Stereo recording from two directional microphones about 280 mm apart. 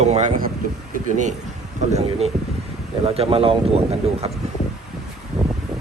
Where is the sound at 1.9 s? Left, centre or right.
Right.